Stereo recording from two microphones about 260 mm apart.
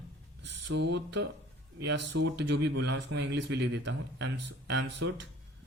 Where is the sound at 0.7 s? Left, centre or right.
Right.